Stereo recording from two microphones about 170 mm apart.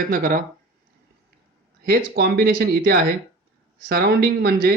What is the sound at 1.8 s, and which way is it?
A man's voice, 65° right (ahead or behind).